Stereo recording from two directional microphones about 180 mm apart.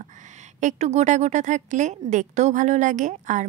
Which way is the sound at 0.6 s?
40° right (ahead or behind).